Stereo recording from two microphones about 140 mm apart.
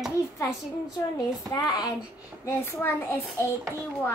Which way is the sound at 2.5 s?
20° left (ahead or behind).